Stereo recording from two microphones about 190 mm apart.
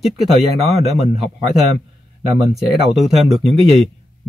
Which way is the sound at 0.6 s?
35° right (ahead or behind).